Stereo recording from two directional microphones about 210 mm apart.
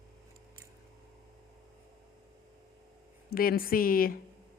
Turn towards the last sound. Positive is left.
turn(degrees=45)  # may be behind; listen again after turning